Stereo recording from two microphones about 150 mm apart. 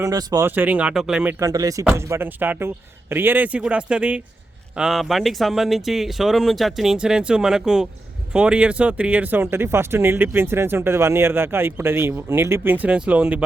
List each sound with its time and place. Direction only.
0.0 s speech: 25° right (ahead or behind)
0.4 s speech: 15° right (ahead or behind)
1.4 s speech: 20° right (ahead or behind)